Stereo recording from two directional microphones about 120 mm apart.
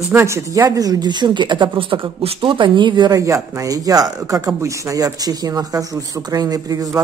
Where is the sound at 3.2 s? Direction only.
25° right (ahead or behind).